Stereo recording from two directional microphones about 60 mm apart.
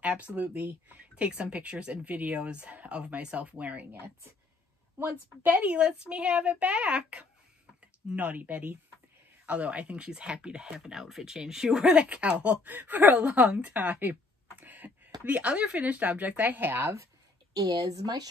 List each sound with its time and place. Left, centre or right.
0.0 s speech: right
5.4 s speech: right
16.7 s a woman's voice: right
17.6 s speech: right